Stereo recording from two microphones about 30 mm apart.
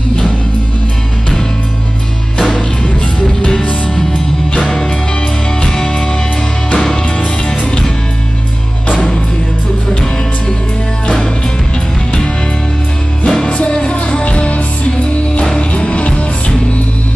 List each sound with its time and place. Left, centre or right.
2.3 s music: left
5.7 s music: left
13.2 s music: left